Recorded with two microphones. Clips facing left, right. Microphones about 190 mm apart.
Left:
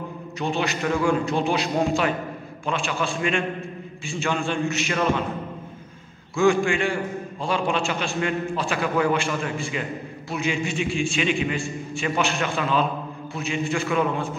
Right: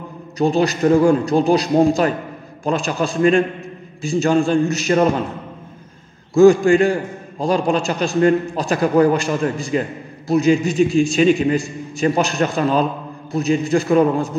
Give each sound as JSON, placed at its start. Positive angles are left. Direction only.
{"t": 0.4, "sound": "a man's voice", "side_deg": -40}
{"t": 6.3, "sound": "a man's voice", "side_deg": -40}